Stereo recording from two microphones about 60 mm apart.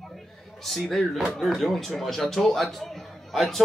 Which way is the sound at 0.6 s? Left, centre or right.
Centre.